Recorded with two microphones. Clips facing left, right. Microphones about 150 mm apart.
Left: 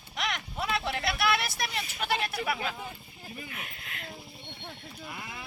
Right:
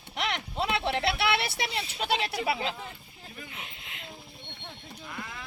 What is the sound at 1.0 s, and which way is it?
Speech, 65° right (ahead or behind).